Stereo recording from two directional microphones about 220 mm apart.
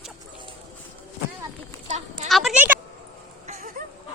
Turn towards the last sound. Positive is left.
turn(degrees=-30)  # may be behind; listen again after turning